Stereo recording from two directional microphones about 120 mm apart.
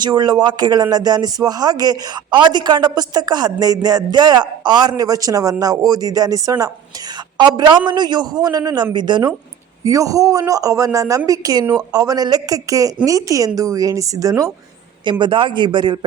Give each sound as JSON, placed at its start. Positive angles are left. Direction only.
{"t": 0.0, "sound": "speech", "side_deg": -35}
{"t": 9.8, "sound": "a man's voice", "side_deg": -25}
{"t": 15.2, "sound": "speech", "side_deg": -45}